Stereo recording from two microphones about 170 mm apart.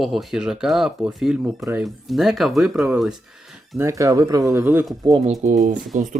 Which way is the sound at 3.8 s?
20° right (ahead or behind).